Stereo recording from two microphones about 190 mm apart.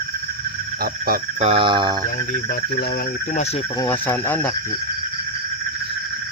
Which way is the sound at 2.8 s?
55° left (ahead or behind).